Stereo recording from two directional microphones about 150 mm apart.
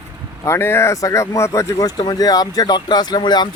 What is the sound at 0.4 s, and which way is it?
Speech, 15° left (ahead or behind).